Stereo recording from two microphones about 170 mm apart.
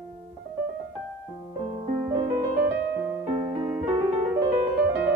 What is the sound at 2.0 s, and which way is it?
Music, 20° right (ahead or behind).